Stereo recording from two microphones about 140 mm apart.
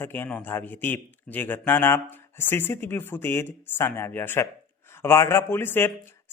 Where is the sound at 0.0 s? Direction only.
15° left (ahead or behind).